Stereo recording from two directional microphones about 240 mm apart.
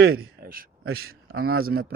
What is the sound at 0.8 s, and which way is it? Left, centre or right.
Speech, right.